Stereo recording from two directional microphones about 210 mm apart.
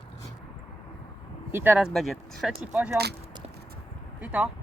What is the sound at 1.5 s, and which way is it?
Speech, 10° right (ahead or behind).